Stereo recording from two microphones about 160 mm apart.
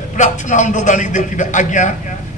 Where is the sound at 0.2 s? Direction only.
50° left (ahead or behind).